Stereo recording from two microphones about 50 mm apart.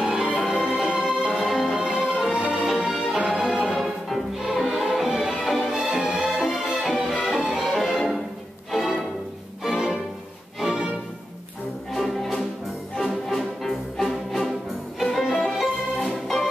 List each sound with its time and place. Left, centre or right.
0.0 s music: centre
6.8 s music: centre
10.6 s music: centre
11.9 s music: centre
16.0 s music: centre